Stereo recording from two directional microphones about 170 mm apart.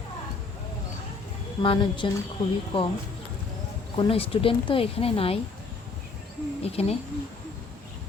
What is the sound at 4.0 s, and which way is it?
Speech, 35° left (ahead or behind).